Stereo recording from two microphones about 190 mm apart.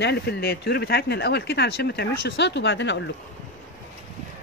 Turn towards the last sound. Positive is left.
turn(degrees=70)  # may be behind; listen again after turning